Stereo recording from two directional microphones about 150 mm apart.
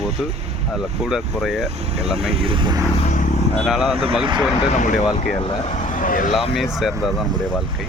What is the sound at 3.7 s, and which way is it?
Speech, 5° right (ahead or behind).